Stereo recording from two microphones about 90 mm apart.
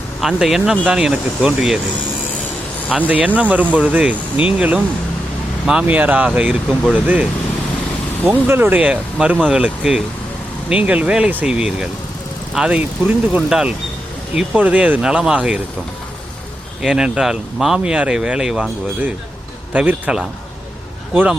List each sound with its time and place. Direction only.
0.2 s speech: 5° right (ahead or behind)
3.1 s speech: 15° right (ahead or behind)
16.8 s speech: 5° right (ahead or behind)
19.7 s speech: 15° right (ahead or behind)